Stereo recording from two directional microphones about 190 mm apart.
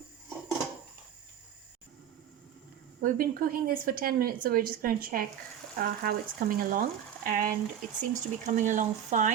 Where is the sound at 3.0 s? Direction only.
50° right (ahead or behind).